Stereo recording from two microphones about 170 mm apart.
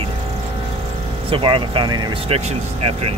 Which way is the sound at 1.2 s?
30° right (ahead or behind).